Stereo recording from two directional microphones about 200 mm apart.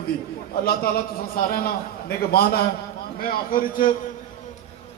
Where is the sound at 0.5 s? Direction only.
50° left (ahead or behind).